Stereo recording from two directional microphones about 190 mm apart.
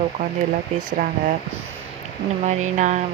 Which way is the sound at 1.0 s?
50° right (ahead or behind).